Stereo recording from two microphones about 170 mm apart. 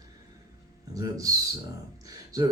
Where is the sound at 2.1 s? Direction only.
20° right (ahead or behind).